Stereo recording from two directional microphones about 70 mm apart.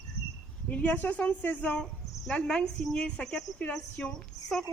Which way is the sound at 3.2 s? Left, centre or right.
Centre.